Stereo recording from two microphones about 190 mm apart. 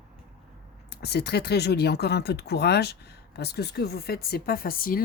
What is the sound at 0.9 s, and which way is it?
Speech, 60° left (ahead or behind).